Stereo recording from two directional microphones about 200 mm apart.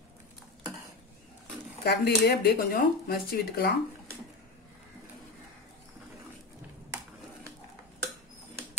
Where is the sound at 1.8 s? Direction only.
55° left (ahead or behind).